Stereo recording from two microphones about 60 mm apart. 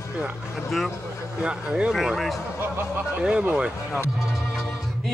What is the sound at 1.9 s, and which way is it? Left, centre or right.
Speech, centre.